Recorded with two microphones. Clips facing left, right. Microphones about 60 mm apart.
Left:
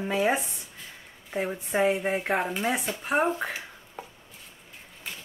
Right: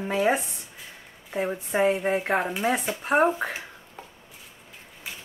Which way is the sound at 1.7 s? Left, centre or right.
Centre.